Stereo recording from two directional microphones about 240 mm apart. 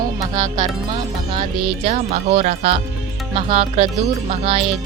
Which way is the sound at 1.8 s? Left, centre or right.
Right.